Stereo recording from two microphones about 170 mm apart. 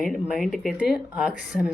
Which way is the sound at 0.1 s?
5° right (ahead or behind).